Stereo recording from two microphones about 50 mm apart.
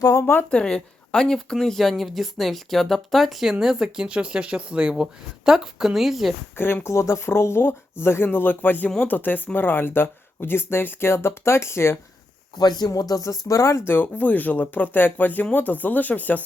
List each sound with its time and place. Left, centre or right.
0.1 s speech: left
0.5 s speech: centre
5.5 s a woman's voice: centre
6.8 s speech: left
8.0 s speech: left
13.5 s speech: left
13.8 s speech: left